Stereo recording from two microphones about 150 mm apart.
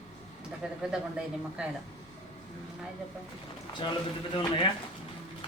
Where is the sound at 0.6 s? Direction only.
5° right (ahead or behind).